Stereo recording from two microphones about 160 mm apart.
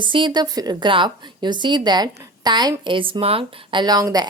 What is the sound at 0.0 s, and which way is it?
A woman's voice, 30° right (ahead or behind).